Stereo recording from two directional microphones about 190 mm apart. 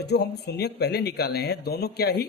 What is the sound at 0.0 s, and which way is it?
Speech, 60° left (ahead or behind).